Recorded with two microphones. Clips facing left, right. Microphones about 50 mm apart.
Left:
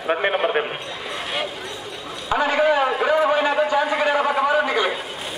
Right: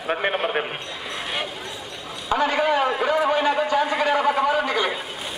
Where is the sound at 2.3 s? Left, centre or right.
Centre.